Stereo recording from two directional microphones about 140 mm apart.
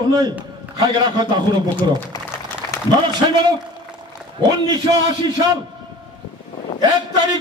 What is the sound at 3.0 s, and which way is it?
A man's voice, 35° right (ahead or behind).